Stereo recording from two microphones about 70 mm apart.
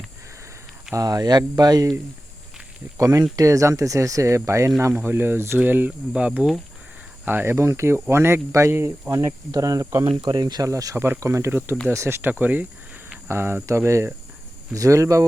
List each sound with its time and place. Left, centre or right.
0.9 s speech: right
3.0 s speech: right
6.1 s speech: centre
7.3 s speech: right
10.7 s speech: right
10.9 s speech: right
12.3 s speech: right
13.2 s speech: right